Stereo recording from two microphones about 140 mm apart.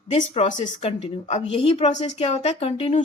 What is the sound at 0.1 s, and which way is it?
Speech, 55° left (ahead or behind).